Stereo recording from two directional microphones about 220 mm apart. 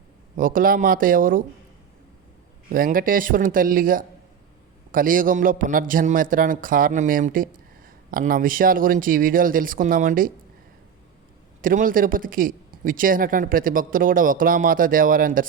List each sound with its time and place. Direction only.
0.3 s a man's voice: 40° right (ahead or behind)
2.6 s a man's voice: 40° right (ahead or behind)
11.6 s a man's voice: 40° right (ahead or behind)